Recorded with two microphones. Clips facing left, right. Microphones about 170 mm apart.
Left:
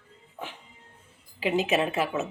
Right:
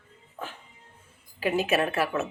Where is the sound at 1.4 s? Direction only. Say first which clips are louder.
Even; 20° left (ahead or behind).